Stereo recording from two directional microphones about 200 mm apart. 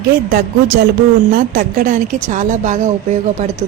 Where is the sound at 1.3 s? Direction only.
45° right (ahead or behind).